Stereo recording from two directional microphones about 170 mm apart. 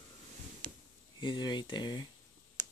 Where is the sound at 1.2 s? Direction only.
25° left (ahead or behind).